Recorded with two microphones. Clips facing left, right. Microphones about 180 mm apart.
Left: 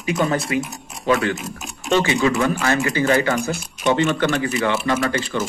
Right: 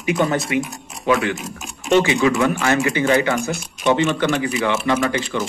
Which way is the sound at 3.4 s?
Centre (ahead or behind).